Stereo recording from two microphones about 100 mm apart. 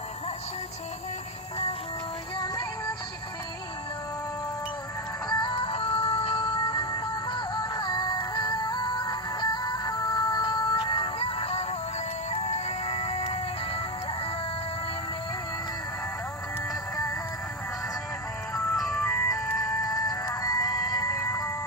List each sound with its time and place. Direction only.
2.4 s music: 50° left (ahead or behind)
5.3 s music: 50° left (ahead or behind)
5.5 s music: 75° left (ahead or behind)
18.9 s music: 10° left (ahead or behind)
19.3 s music: 35° left (ahead or behind)